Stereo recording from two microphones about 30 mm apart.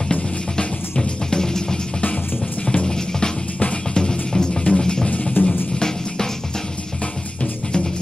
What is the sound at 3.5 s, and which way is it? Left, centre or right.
Music, left.